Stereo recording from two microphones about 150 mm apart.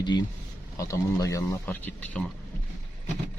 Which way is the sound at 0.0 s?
30° left (ahead or behind).